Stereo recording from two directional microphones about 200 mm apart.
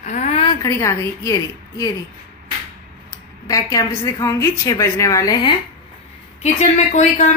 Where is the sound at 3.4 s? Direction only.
15° left (ahead or behind).